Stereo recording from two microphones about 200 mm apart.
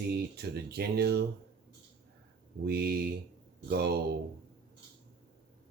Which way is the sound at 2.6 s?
50° right (ahead or behind).